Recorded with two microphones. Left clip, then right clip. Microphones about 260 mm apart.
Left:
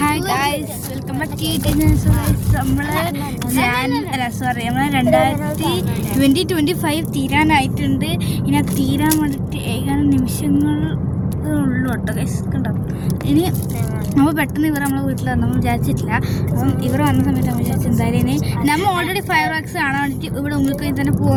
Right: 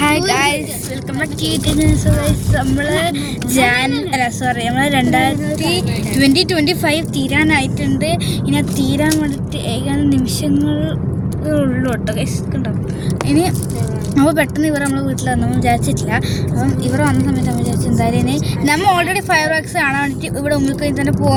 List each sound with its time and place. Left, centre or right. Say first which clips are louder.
0.1 s a sound: right 4 dB; left
2.7 s speech: right 4 dB; centre
5.6 s a woman's voice: right 3 dB; left
6.9 s speech: right 2 dB; centre
9.9 s speech: right 1 dB; centre
13.2 s a woman's voice: right 2 dB; left
14.2 s speech: right 3 dB; centre